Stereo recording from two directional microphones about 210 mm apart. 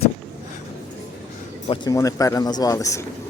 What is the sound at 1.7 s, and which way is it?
Speech, 15° left (ahead or behind).